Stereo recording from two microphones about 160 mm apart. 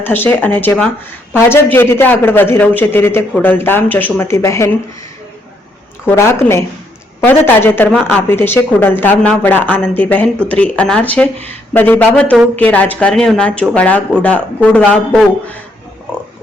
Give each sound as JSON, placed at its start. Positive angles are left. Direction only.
{"t": 0.0, "sound": "speech", "side_deg": 15}
{"t": 6.1, "sound": "speech", "side_deg": 15}